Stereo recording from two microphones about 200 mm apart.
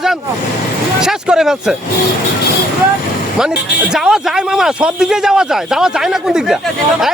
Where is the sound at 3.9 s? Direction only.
Centre (ahead or behind).